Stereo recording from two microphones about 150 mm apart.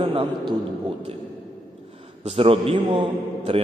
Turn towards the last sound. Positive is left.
turn(degrees=-40)  # may be behind; listen again after turning